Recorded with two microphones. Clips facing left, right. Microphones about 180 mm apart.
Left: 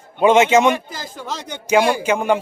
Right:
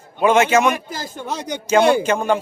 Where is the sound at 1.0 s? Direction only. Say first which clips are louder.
Right 2 dB; 60° right (ahead or behind).